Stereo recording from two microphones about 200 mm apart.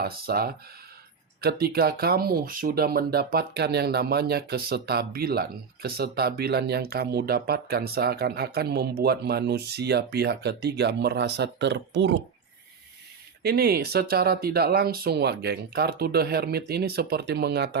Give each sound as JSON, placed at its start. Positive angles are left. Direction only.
{"t": 0.0, "sound": "speech", "side_deg": -50}
{"t": 13.4, "sound": "speech", "side_deg": -50}